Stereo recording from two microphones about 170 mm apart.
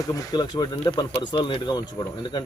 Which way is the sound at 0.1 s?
25° left (ahead or behind).